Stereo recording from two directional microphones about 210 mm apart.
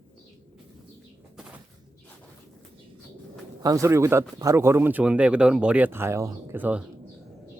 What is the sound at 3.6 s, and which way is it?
Speech, 15° right (ahead or behind).